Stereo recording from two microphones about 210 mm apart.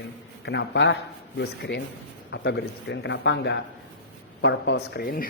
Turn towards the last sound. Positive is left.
turn(degrees=45)  # may be behind; listen again after turning